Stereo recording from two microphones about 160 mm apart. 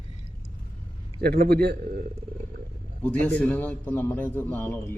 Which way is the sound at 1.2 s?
75° right (ahead or behind).